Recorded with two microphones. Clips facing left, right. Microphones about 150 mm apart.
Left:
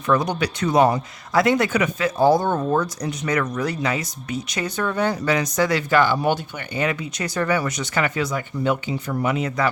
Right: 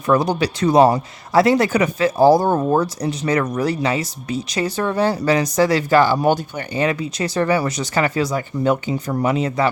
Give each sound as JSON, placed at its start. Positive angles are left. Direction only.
{"t": 0.1, "sound": "speech", "side_deg": -30}